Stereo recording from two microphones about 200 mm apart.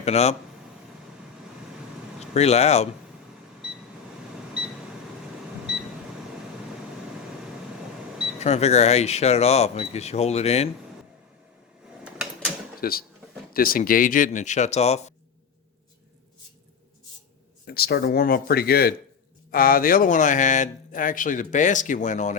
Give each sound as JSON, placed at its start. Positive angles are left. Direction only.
{"t": 0.0, "sound": "speech", "side_deg": 35}
{"t": 2.3, "sound": "speech", "side_deg": 30}
{"t": 8.4, "sound": "speech", "side_deg": 35}
{"t": 12.8, "sound": "speech", "side_deg": 50}
{"t": 17.7, "sound": "speech", "side_deg": 50}